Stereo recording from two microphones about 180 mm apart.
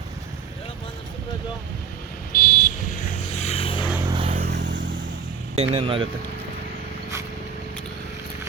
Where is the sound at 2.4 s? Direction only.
45° left (ahead or behind).